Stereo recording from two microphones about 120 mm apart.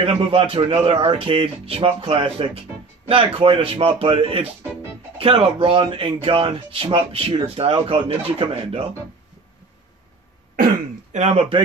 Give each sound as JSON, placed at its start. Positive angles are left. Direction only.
{"t": 0.0, "sound": "speech", "side_deg": -50}
{"t": 11.1, "sound": "a man's voice", "side_deg": -70}